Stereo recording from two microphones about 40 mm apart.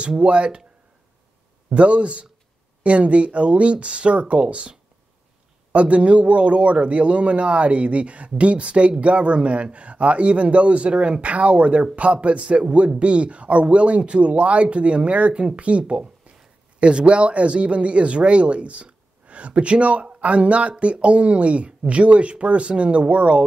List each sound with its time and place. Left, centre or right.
0.2 s a man's voice: right
1.7 s a man's voice: right
15.9 s a sound: right
16.8 s a man's voice: right